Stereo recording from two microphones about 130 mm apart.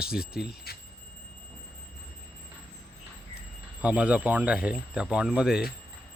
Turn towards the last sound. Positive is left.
turn(degrees=-5)  # may be behind; listen again after turning